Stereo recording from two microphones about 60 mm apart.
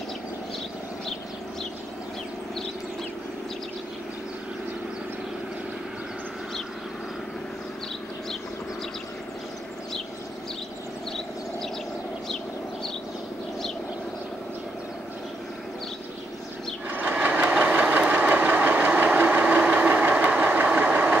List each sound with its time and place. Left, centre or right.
16.9 s sewing machine: right
17.6 s vehicle: right
18.3 s engine: right
19.5 s vehicle: right